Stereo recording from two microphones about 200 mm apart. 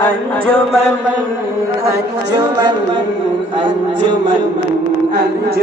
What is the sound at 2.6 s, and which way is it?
Mantra, 20° right (ahead or behind).